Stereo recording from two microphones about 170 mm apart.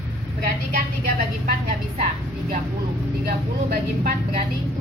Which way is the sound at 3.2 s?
65° right (ahead or behind).